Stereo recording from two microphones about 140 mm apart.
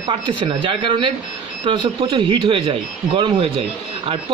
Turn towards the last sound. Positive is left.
turn(degrees=-40)  # may be behind; listen again after turning